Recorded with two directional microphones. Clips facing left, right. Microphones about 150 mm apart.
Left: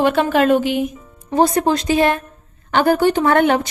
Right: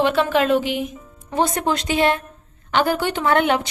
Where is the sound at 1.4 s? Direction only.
35° left (ahead or behind).